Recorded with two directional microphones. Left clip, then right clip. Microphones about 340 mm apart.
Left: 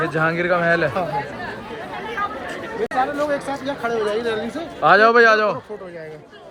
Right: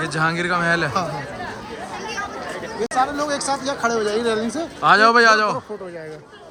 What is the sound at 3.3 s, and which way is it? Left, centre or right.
Speech, centre.